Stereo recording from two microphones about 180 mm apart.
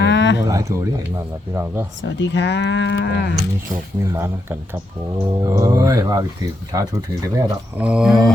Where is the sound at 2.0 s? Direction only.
80° left.